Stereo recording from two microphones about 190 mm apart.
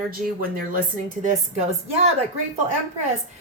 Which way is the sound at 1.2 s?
35° right (ahead or behind).